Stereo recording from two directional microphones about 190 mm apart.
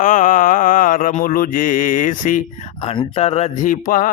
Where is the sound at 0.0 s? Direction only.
45° left (ahead or behind).